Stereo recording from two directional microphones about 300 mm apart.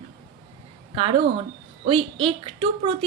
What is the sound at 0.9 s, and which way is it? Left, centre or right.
A woman's voice, centre.